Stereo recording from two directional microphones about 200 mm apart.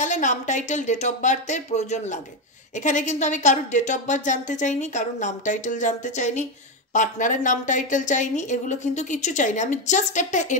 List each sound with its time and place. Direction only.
0.0 s speech: 40° left (ahead or behind)